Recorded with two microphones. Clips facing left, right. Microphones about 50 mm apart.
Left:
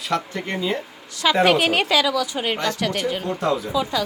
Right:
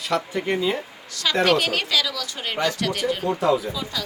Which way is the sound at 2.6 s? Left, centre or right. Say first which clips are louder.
Even; centre.